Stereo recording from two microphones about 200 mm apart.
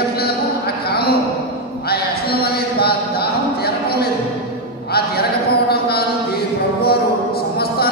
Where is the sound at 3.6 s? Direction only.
50° left (ahead or behind).